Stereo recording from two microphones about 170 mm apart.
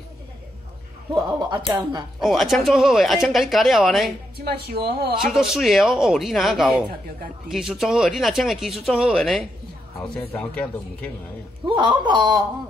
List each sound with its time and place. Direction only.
1.1 s speech: 25° right (ahead or behind)
2.2 s speech: centre (ahead or behind)
5.2 s speech: centre (ahead or behind)
11.6 s speech: 25° right (ahead or behind)